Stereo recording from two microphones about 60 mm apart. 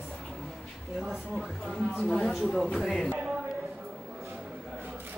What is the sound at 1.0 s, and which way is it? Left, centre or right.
Speech, centre.